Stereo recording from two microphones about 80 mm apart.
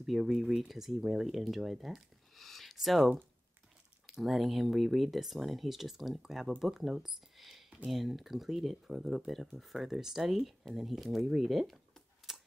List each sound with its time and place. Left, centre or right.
0.0 s speech: centre
12.3 s typewriter: centre